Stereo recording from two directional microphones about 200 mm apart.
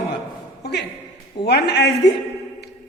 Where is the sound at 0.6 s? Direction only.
55° left (ahead or behind).